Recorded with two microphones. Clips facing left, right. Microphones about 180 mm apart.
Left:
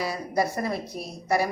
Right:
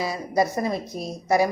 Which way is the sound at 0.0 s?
20° right (ahead or behind).